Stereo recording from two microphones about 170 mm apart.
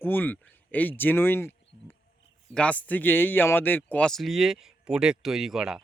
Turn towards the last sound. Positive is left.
turn(degrees=0)  # may be behind; listen again after turning